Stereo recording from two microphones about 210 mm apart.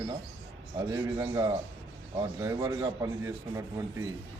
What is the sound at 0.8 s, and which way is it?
A man's voice, 15° right (ahead or behind).